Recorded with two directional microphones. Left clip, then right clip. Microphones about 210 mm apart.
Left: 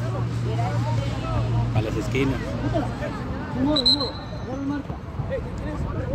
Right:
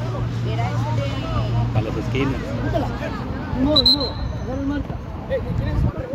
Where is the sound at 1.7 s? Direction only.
20° left (ahead or behind).